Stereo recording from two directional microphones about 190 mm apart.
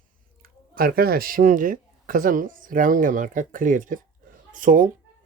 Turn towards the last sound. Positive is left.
turn(degrees=-45)  # may be behind; listen again after turning